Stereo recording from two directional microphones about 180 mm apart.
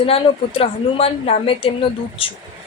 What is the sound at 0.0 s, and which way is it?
A woman's voice, 30° left (ahead or behind).